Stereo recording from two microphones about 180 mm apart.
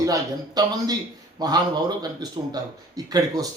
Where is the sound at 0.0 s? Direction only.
20° right (ahead or behind).